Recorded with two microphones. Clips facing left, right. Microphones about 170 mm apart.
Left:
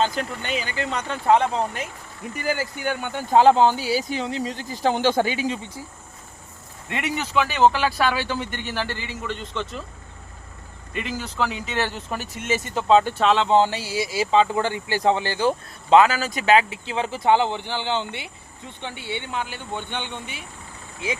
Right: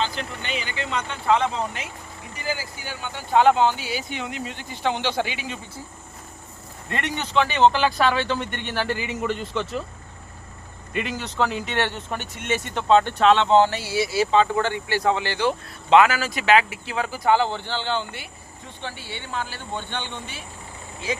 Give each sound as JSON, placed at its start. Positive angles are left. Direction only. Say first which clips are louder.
{"t": 0.0, "sound": "speech", "louder": "left 4 dB", "side_deg": 45}
{"t": 3.3, "sound": "speech", "louder": "left 2 dB", "side_deg": 35}
{"t": 6.9, "sound": "speech", "louder": "even", "side_deg": 5}
{"t": 9.0, "sound": "a man's voice", "louder": "right 5 dB", "side_deg": -10}
{"t": 11.1, "sound": "speech", "louder": "right 1 dB", "side_deg": 0}
{"t": 13.6, "sound": "speech", "louder": "right 1 dB", "side_deg": 15}
{"t": 15.9, "sound": "speech", "louder": "left 1 dB", "side_deg": 30}
{"t": 16.6, "sound": "speech", "louder": "left 1 dB", "side_deg": 25}